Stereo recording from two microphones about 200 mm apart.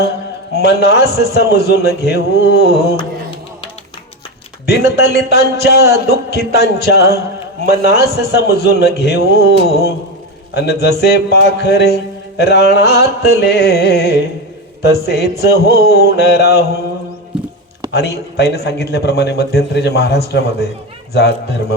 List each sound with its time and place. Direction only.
0.6 s speech: 55° left (ahead or behind)
4.6 s speech: 55° left (ahead or behind)
17.9 s a man's voice: 55° left (ahead or behind)